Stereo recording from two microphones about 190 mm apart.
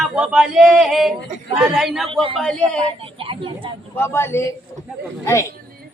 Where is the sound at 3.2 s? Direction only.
30° right (ahead or behind).